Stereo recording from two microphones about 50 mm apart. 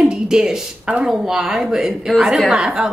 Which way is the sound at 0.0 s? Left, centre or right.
Centre.